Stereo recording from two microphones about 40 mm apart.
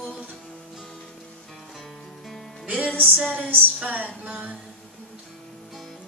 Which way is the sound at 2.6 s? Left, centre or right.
Right.